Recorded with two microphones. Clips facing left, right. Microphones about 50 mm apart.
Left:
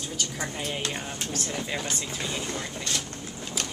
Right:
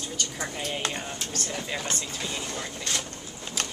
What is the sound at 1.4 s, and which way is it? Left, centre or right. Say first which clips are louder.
A woman's voice: even; centre.